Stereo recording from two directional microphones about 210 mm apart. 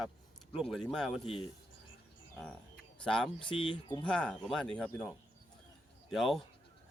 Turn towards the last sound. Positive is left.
turn(degrees=0)  # may be behind; listen again after turning